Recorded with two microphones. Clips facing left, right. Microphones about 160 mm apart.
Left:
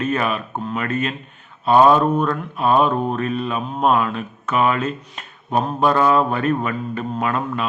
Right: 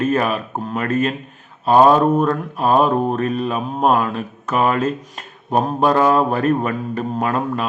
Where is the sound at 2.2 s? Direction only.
40° right (ahead or behind).